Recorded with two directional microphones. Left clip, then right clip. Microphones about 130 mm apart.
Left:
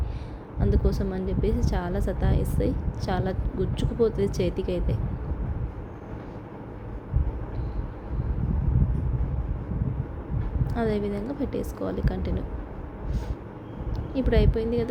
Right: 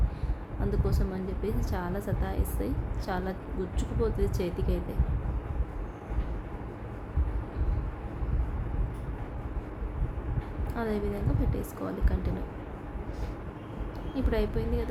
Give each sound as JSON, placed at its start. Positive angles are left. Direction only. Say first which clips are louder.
{"t": 0.6, "sound": "speech", "louder": "left 5 dB", "side_deg": 15}
{"t": 10.8, "sound": "a woman's voice", "louder": "left 5 dB", "side_deg": 20}
{"t": 14.1, "sound": "speech", "louder": "left 6 dB", "side_deg": 15}